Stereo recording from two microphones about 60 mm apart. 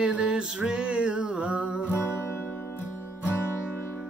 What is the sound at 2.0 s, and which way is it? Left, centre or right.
Music, left.